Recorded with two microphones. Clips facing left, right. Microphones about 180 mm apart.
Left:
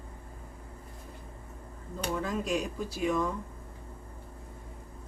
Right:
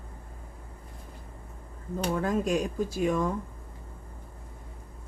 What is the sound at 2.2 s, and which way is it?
Speech, 50° right (ahead or behind).